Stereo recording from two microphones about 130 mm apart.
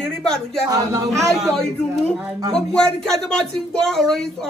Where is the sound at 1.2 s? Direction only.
5° left (ahead or behind).